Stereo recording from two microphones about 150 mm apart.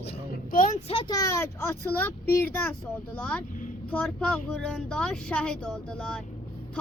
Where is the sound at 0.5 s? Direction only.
60° left (ahead or behind).